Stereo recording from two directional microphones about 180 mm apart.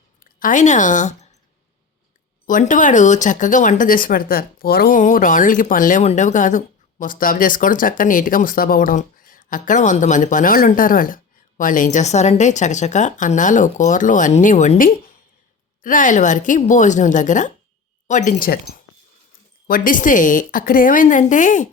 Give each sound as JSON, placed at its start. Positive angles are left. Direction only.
{"t": 0.2, "sound": "a woman's voice", "side_deg": 50}
{"t": 2.5, "sound": "speech", "side_deg": 45}